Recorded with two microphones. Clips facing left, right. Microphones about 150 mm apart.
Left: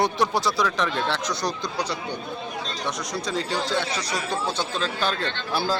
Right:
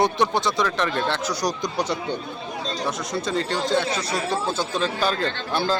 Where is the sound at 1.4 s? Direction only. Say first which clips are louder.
Right 3 dB; 20° right (ahead or behind).